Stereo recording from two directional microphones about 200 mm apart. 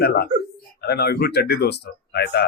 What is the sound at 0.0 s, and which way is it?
Speech, 50° left (ahead or behind).